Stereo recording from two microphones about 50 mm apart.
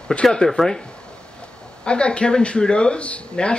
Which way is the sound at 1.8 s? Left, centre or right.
Left.